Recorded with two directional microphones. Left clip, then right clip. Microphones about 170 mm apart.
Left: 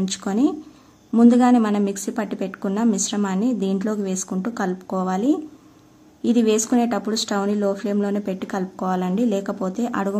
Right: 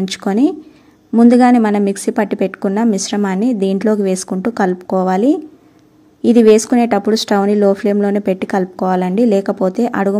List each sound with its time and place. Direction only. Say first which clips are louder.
0.0 s a woman's voice: right 7 dB; 30° right (ahead or behind)